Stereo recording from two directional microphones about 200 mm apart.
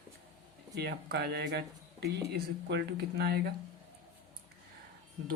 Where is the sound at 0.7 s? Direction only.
55° right (ahead or behind).